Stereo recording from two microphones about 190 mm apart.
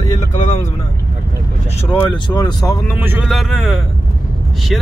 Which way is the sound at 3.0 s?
10° right (ahead or behind).